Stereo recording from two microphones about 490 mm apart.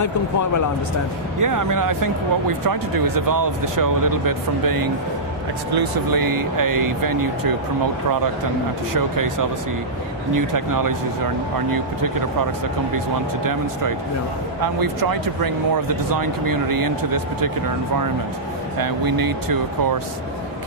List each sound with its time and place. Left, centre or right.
0.0 s speech: left
1.4 s speech: right
9.0 s speech: right
10.3 s speech: right
13.4 s speech: right
18.8 s speech: right